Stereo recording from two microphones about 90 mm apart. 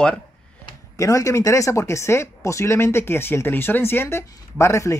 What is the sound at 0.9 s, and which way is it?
Speech, 35° left (ahead or behind).